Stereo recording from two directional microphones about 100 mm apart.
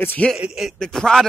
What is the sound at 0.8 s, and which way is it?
Speech, 5° left (ahead or behind).